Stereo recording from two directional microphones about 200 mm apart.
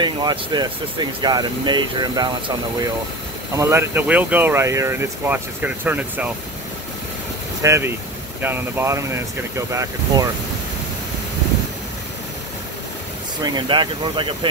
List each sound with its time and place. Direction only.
0.0 s speech: 20° right (ahead or behind)
7.6 s speech: 15° right (ahead or behind)
13.4 s speech: 25° right (ahead or behind)